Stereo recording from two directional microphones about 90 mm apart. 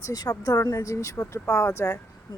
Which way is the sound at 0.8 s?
35° left (ahead or behind).